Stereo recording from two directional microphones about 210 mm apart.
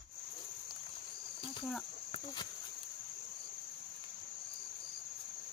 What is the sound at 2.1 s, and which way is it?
Cricket, 20° left (ahead or behind).